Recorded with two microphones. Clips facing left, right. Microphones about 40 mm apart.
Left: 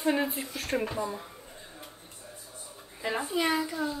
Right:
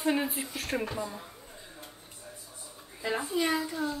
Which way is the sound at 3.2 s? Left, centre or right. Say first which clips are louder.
Left 2 dB; left.